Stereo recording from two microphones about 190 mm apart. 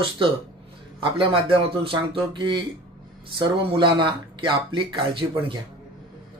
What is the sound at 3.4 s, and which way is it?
Speech, 25° right (ahead or behind).